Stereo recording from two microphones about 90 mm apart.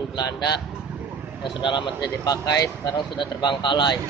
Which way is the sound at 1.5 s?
60° left (ahead or behind).